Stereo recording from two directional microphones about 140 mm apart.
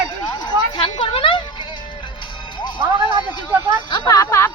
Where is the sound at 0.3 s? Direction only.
30° left (ahead or behind).